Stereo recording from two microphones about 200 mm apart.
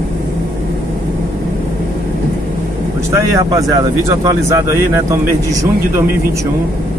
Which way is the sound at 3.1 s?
15° right (ahead or behind).